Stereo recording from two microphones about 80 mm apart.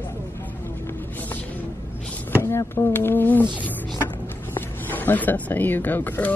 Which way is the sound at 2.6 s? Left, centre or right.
Left.